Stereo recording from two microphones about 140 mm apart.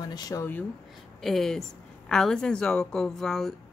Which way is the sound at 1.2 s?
Centre (ahead or behind).